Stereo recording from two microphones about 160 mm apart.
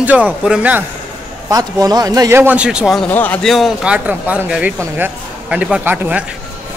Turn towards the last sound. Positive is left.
turn(degrees=-10)  # may be behind; listen again after turning